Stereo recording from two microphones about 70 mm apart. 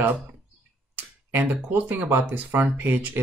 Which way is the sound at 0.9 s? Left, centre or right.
Right.